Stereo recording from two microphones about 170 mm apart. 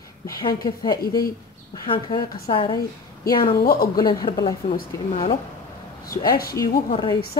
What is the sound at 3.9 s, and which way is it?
Speech, 25° left (ahead or behind).